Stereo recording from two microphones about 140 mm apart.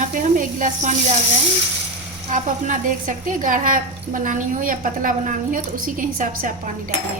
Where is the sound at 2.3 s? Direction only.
65° right (ahead or behind).